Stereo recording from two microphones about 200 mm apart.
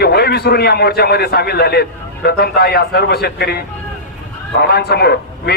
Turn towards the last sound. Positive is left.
turn(degrees=55)  # may be behind; listen again after turning